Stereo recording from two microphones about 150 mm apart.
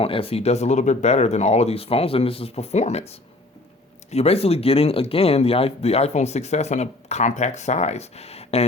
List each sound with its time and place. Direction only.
0.0 s speech: 40° left (ahead or behind)